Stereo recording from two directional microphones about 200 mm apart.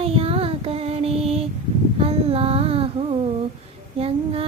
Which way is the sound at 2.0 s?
30° right (ahead or behind).